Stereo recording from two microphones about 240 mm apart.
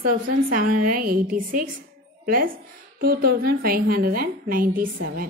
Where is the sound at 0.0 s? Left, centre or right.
Right.